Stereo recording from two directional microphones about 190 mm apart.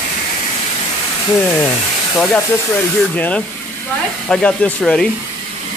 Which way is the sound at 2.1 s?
5° left (ahead or behind).